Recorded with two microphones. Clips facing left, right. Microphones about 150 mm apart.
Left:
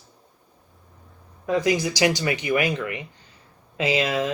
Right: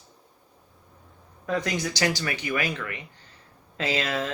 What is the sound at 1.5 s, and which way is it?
Speech, 10° left (ahead or behind).